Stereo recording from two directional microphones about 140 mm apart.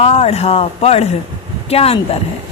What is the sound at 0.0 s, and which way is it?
A woman's voice, 45° left (ahead or behind).